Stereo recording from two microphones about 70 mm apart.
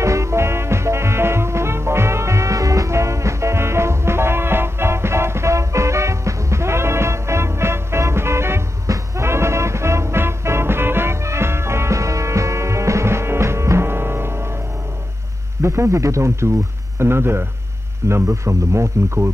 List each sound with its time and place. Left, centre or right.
0.0 s music: right
15.6 s speech: right
17.0 s speech: right